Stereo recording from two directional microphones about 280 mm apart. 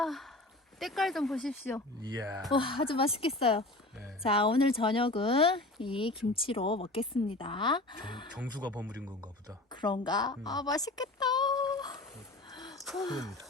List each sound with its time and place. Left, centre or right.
0.0 s speech: centre
2.0 s speech: centre
2.5 s speech: centre
8.4 s speech: centre
9.8 s speech: centre
12.5 s gasp: centre
13.0 s speech: centre